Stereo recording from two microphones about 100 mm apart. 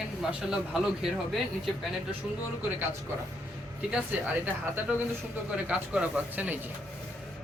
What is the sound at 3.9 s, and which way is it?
Speech, 15° right (ahead or behind).